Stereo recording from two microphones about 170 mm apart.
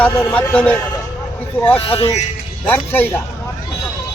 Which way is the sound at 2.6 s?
10° left (ahead or behind).